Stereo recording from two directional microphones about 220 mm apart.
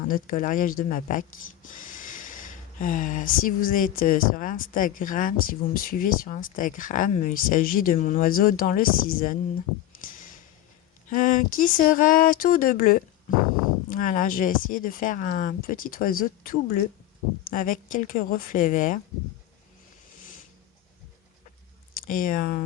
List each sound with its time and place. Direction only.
0.1 s speech: 40° left (ahead or behind)
9.9 s a sound: 40° left (ahead or behind)
11.1 s speech: 35° left (ahead or behind)
21.9 s speech: 40° left (ahead or behind)